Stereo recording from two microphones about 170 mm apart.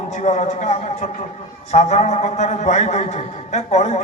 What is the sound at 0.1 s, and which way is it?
A man's voice, 40° left (ahead or behind).